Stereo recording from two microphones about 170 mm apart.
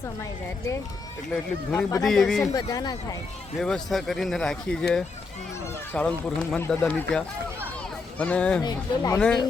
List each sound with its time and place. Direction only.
1.3 s speech: 5° left (ahead or behind)
2.5 s speech: 20° left (ahead or behind)
3.6 s speech: centre (ahead or behind)
8.6 s speech: 20° left (ahead or behind)